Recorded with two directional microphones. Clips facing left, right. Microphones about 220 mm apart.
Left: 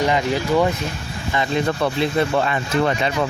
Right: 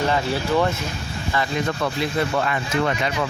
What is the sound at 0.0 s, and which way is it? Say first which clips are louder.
Speech: left 3 dB; 15° left (ahead or behind).